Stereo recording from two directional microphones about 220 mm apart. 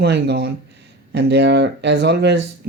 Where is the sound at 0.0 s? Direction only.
50° right (ahead or behind).